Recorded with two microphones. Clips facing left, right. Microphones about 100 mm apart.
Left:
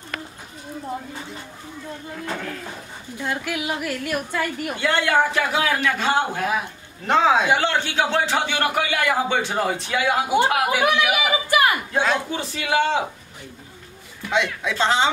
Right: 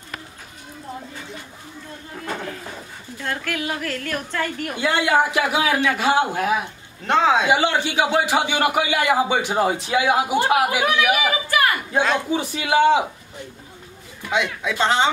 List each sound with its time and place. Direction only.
3.2 s a woman's voice: 15° left (ahead or behind)
4.7 s a man's voice: 15° right (ahead or behind)
7.1 s a man's voice: centre (ahead or behind)
7.4 s a man's voice: 10° right (ahead or behind)
11.1 s speech: 15° left (ahead or behind)
11.9 s a man's voice: centre (ahead or behind)
12.3 s a man's voice: 15° right (ahead or behind)
14.3 s a man's voice: centre (ahead or behind)